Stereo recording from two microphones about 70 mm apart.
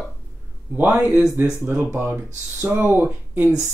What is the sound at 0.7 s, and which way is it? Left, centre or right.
Speech, right.